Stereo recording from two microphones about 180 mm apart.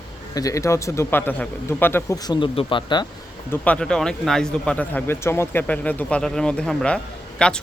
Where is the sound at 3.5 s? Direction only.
5° left (ahead or behind).